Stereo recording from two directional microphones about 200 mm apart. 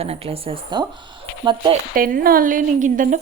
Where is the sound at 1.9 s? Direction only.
45° right (ahead or behind).